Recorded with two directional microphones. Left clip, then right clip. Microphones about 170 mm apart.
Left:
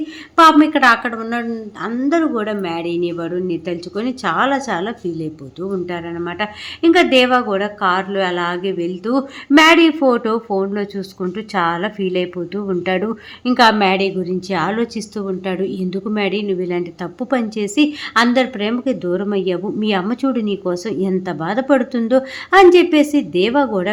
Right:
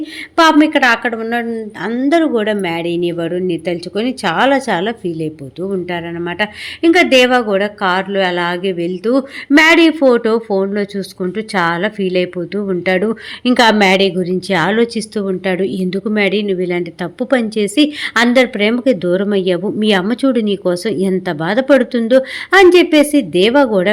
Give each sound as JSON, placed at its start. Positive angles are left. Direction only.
{"t": 0.0, "sound": "speech", "side_deg": -15}